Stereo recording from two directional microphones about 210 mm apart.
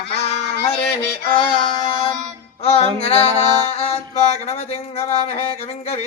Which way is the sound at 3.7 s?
30° left (ahead or behind).